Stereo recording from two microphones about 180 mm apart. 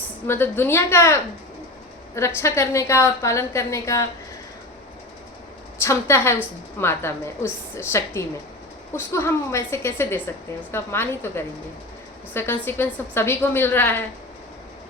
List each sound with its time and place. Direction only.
0.3 s a woman's voice: 10° left (ahead or behind)
5.8 s a woman's voice: 15° left (ahead or behind)